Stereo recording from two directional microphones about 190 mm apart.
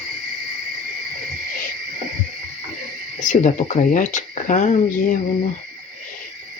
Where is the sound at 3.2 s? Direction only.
40° left (ahead or behind).